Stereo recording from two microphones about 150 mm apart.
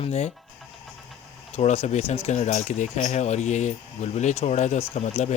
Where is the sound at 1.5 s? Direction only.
45° left (ahead or behind).